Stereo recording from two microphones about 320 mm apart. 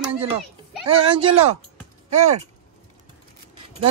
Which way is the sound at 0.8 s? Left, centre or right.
Centre.